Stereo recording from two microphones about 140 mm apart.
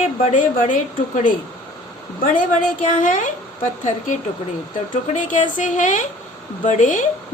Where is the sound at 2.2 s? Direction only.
80° left.